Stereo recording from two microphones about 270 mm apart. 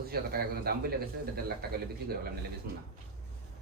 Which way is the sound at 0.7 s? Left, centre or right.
Right.